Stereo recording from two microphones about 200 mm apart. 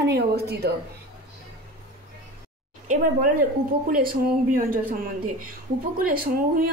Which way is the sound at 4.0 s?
45° right (ahead or behind).